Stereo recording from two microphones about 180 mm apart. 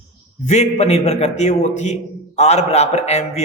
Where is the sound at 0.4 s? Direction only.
40° left (ahead or behind).